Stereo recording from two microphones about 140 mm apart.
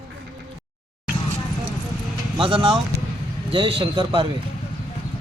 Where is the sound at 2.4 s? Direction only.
40° right (ahead or behind).